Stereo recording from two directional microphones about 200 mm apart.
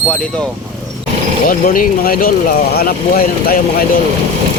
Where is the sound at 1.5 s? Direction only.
45° left (ahead or behind).